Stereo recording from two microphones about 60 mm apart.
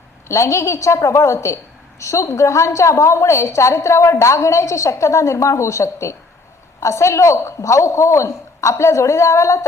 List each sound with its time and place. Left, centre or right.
0.3 s a woman's voice: left